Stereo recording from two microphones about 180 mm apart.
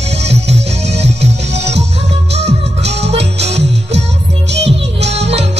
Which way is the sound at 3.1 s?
75° right (ahead or behind).